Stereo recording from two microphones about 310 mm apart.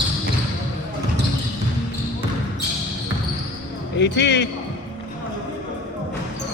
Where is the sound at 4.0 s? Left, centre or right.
Left.